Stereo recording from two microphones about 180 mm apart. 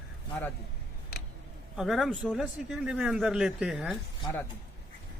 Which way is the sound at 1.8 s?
Centre (ahead or behind).